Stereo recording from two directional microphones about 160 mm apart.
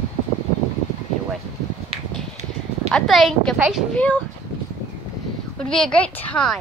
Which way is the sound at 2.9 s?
Centre (ahead or behind).